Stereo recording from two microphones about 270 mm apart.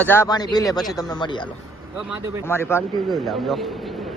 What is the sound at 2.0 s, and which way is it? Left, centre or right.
Speech, centre.